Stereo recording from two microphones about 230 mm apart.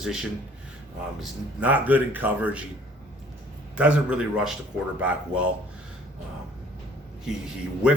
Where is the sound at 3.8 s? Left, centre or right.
Centre.